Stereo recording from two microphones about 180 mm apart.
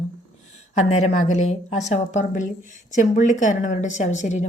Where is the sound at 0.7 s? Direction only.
40° left (ahead or behind).